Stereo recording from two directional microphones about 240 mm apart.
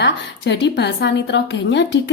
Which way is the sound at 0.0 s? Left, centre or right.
Left.